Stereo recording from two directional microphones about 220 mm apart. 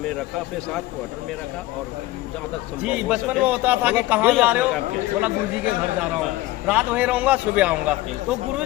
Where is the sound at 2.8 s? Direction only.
5° right (ahead or behind).